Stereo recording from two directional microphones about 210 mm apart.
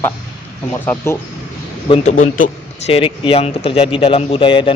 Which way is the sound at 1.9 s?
35° left (ahead or behind).